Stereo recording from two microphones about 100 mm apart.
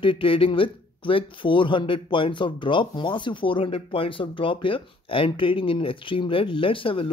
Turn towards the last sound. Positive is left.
turn(degrees=60)  # may be behind; listen again after turning